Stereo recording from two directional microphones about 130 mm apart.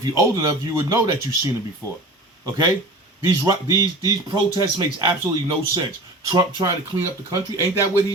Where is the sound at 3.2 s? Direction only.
25° right (ahead or behind).